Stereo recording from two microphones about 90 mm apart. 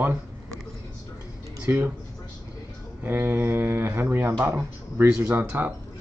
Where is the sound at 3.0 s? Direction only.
25° right (ahead or behind).